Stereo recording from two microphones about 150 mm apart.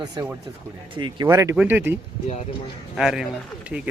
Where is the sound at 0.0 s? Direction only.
25° right (ahead or behind).